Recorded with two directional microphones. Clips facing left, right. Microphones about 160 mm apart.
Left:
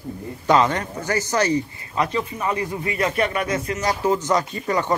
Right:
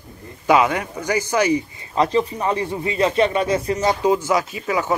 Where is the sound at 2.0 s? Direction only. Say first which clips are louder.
Right 5 dB; 30° right (ahead or behind).